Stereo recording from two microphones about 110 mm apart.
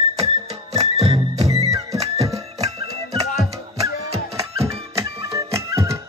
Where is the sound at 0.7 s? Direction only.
65° right (ahead or behind).